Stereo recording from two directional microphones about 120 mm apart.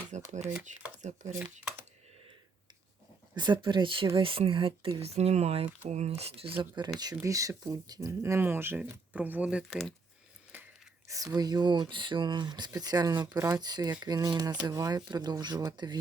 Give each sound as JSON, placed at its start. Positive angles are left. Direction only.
{"t": 0.1, "sound": "speech", "side_deg": -80}
{"t": 3.3, "sound": "speech", "side_deg": -40}
{"t": 7.2, "sound": "speech", "side_deg": -25}
{"t": 9.6, "sound": "speech", "side_deg": 5}
{"t": 11.1, "sound": "speech", "side_deg": -30}